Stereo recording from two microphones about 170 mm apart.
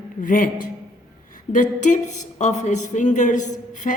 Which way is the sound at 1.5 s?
45° left (ahead or behind).